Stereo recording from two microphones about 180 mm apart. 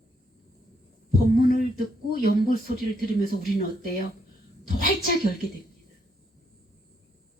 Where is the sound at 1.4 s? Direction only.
50° left (ahead or behind).